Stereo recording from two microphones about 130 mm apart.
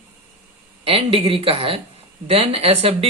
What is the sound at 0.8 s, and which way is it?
A man's voice, 45° right (ahead or behind).